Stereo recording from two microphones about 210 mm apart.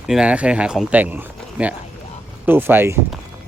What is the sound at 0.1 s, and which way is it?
Speech, 5° right (ahead or behind).